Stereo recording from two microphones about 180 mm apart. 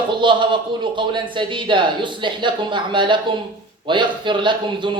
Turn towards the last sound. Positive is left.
turn(degrees=-25)  # may be behind; listen again after turning